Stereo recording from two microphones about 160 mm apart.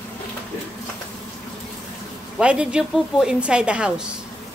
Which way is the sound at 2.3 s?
5° right (ahead or behind).